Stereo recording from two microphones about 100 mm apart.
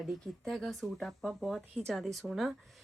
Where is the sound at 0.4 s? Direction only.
5° left (ahead or behind).